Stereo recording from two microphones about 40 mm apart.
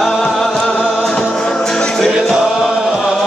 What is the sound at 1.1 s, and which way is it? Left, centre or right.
Music, centre.